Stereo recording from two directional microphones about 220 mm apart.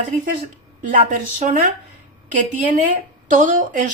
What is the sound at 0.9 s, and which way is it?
Speech, 40° right (ahead or behind).